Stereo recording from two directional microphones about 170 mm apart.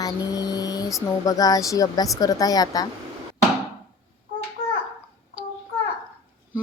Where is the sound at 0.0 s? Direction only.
20° left (ahead or behind).